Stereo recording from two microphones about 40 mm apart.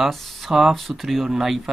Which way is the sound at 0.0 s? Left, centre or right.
Centre.